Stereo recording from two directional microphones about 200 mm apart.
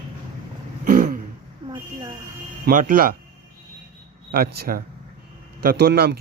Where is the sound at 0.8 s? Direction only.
45° right (ahead or behind).